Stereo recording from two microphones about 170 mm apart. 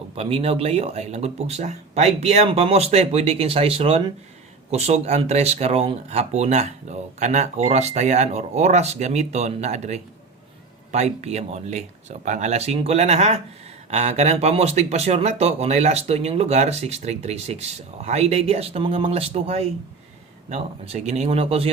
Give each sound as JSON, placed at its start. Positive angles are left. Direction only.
{"t": 0.2, "sound": "speech", "side_deg": -35}